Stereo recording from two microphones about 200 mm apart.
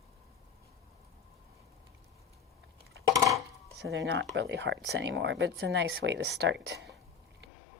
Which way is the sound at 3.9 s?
65° right (ahead or behind).